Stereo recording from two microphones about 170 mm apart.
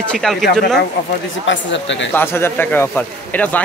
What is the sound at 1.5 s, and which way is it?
Speech, 90° left.